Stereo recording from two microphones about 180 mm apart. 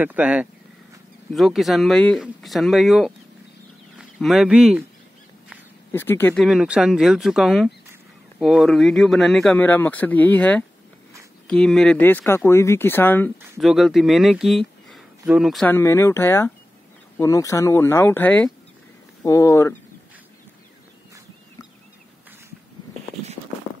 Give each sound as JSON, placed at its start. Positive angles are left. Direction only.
{"t": 0.0, "sound": "speech", "side_deg": -10}
{"t": 5.9, "sound": "speech", "side_deg": 10}
{"t": 6.4, "sound": "speech", "side_deg": -5}
{"t": 13.6, "sound": "speech", "side_deg": 0}
{"t": 15.6, "sound": "speech", "side_deg": 15}